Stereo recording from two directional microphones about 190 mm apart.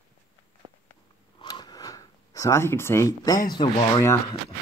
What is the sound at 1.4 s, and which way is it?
Speech, 20° left (ahead or behind).